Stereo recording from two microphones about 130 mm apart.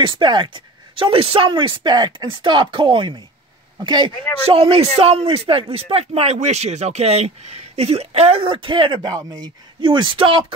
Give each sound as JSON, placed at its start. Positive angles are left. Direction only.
{"t": 0.2, "sound": "speech", "side_deg": -35}